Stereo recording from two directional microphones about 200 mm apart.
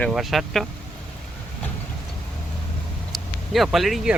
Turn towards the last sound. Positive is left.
turn(degrees=0)  # may be behind; listen again after turning